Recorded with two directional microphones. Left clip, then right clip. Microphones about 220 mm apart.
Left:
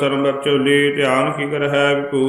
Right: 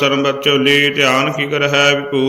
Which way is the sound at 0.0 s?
15° right (ahead or behind).